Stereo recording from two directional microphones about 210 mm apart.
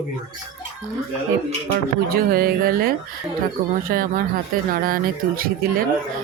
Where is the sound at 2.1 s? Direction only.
45° right (ahead or behind).